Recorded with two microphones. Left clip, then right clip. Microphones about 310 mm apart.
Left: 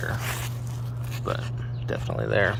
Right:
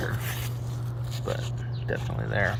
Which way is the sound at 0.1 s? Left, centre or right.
Centre.